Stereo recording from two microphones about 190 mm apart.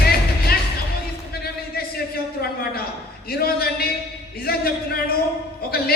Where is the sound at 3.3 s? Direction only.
55° left (ahead or behind).